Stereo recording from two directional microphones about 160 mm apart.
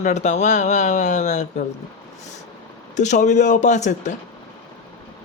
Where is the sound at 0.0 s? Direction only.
45° left (ahead or behind).